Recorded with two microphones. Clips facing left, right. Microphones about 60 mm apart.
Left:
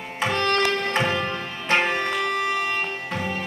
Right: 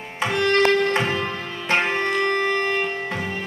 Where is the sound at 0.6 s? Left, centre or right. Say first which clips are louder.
Right 4 dB; right.